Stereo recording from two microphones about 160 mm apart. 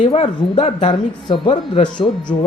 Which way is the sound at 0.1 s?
35° left (ahead or behind).